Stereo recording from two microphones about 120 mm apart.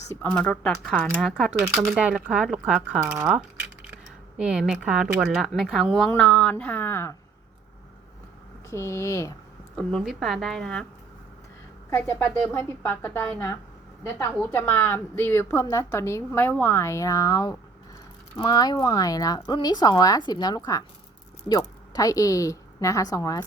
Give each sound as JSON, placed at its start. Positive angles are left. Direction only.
{"t": 0.2, "sound": "speech", "side_deg": 10}
{"t": 1.7, "sound": "speech", "side_deg": -5}
{"t": 8.7, "sound": "a woman's voice", "side_deg": 25}
{"t": 9.7, "sound": "speech", "side_deg": 0}
{"t": 11.9, "sound": "a woman's voice", "side_deg": 20}